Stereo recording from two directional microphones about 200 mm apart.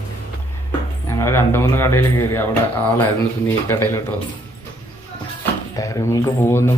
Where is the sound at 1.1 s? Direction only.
15° left (ahead or behind).